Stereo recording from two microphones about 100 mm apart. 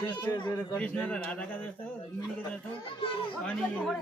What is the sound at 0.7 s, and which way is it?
Speech, 15° left (ahead or behind).